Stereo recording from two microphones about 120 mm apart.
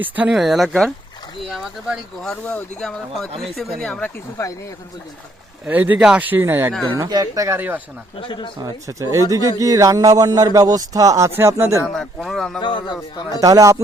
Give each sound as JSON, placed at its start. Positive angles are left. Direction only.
{"t": 0.0, "sound": "speech", "side_deg": -10}
{"t": 5.6, "sound": "speech", "side_deg": -15}
{"t": 7.0, "sound": "speech", "side_deg": -30}
{"t": 8.2, "sound": "speech", "side_deg": 40}
{"t": 8.5, "sound": "speech", "side_deg": -30}
{"t": 11.9, "sound": "speech", "side_deg": 0}
{"t": 12.5, "sound": "speech", "side_deg": 40}
{"t": 13.4, "sound": "speech", "side_deg": -30}